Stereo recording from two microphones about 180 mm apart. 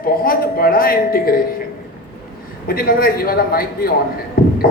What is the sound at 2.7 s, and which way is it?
A woman's voice, 55° left (ahead or behind).